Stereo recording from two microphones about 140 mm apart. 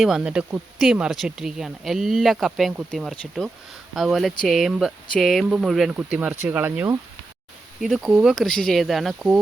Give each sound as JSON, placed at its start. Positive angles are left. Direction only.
{"t": 0.0, "sound": "speech", "side_deg": -5}
{"t": 7.8, "sound": "speech", "side_deg": 0}